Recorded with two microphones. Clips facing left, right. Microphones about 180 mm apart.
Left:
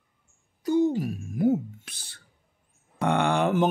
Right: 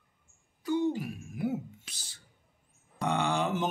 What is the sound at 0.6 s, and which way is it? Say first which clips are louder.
Speech: left 6 dB; 40° left (ahead or behind).